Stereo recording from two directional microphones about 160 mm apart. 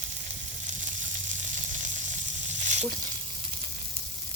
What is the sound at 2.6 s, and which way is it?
Frying, 50° right (ahead or behind).